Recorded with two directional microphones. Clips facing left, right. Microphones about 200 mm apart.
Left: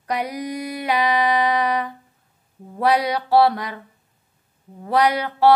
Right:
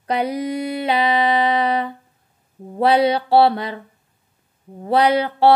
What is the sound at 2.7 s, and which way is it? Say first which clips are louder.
A woman's voice: right 4 dB; 30° right (ahead or behind).